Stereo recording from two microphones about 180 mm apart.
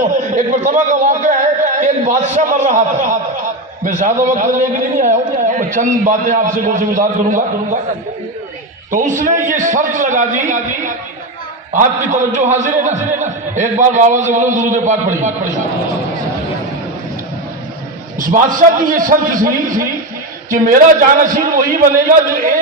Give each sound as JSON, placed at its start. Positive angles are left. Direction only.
{"t": 0.1, "sound": "a sound", "side_deg": -45}
{"t": 3.8, "sound": "a man's voice", "side_deg": -45}
{"t": 8.9, "sound": "a man's voice", "side_deg": -45}
{"t": 18.2, "sound": "a man's voice", "side_deg": -50}